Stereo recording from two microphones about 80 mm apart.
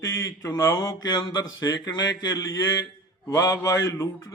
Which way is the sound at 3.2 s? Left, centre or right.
Left.